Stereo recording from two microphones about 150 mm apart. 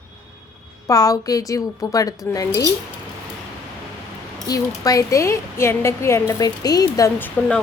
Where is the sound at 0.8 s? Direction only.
25° left (ahead or behind).